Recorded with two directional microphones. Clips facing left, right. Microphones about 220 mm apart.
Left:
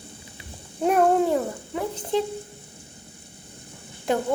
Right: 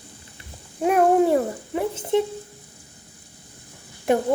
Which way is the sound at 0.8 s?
5° right (ahead or behind).